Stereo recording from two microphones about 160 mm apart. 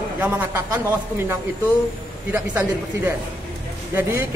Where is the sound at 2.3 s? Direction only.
10° right (ahead or behind).